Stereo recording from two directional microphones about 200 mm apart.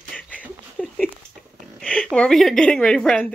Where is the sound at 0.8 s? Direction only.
5° left (ahead or behind).